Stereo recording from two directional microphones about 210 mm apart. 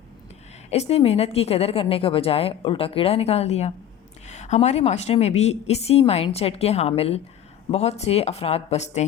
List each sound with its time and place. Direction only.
0.7 s a woman's voice: 30° left (ahead or behind)